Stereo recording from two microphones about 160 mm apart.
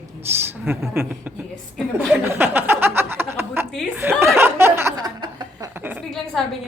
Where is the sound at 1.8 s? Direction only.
5° right (ahead or behind); by 5.7 s 25° right (ahead or behind).